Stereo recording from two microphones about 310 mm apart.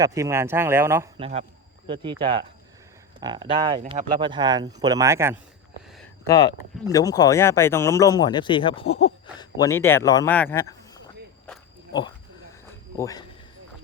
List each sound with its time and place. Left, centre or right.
0.0 s speech: centre
6.2 s speech: centre
13.0 s speech: centre